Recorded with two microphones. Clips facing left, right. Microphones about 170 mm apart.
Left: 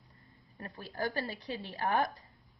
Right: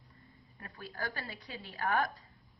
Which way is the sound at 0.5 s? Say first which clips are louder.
Left 4 dB; 30° left (ahead or behind).